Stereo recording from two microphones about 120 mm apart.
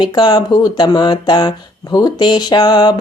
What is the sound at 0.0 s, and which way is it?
Speech, 40° left (ahead or behind).